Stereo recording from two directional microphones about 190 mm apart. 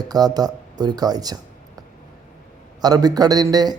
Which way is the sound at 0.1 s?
20° right (ahead or behind).